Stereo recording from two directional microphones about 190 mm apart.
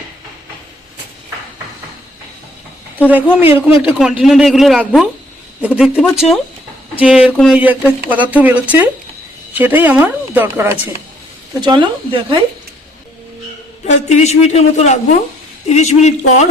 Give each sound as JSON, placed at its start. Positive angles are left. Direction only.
{"t": 3.0, "sound": "a man's voice", "side_deg": -10}
{"t": 11.6, "sound": "speech", "side_deg": -25}
{"t": 13.8, "sound": "a woman's voice", "side_deg": 40}